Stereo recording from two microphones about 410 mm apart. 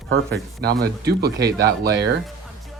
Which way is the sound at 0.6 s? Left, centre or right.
Right.